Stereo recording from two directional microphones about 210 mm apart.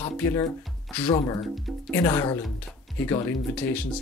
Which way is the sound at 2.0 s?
20° left (ahead or behind).